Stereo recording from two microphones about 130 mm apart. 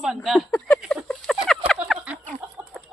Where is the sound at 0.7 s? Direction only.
Centre (ahead or behind).